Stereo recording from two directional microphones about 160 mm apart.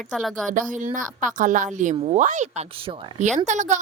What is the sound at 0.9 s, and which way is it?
Speech, 55° right (ahead or behind).